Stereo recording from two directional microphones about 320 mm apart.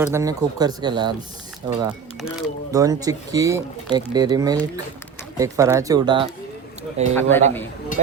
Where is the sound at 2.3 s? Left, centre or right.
Centre.